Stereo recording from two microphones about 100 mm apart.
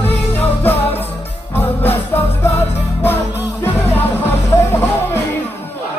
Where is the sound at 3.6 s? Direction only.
20° left (ahead or behind).